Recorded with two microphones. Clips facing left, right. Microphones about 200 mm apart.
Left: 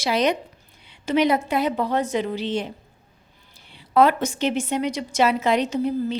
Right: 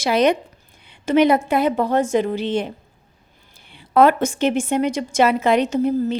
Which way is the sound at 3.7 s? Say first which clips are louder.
Right 3 dB; 55° right (ahead or behind).